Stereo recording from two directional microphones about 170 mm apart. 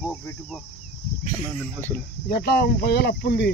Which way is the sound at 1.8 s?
10° left (ahead or behind).